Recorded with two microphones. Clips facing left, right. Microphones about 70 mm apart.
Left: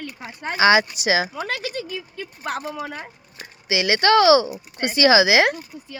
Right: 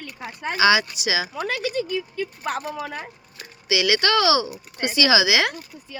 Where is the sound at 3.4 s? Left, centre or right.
Left.